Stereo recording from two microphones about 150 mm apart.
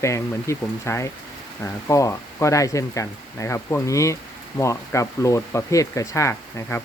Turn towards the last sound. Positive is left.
turn(degrees=20)  # may be behind; listen again after turning